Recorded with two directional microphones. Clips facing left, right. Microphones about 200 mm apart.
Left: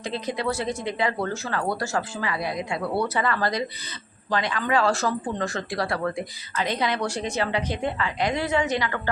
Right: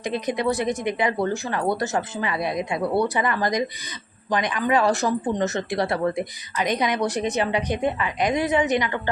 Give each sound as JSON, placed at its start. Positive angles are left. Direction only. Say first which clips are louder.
{"t": 0.0, "sound": "speech", "louder": "right 4 dB", "side_deg": -15}